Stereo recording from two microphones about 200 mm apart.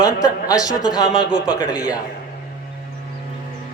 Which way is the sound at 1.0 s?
5° right (ahead or behind).